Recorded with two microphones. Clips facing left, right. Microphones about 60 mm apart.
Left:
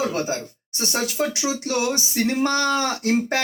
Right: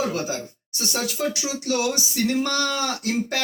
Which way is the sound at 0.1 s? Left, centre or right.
Left.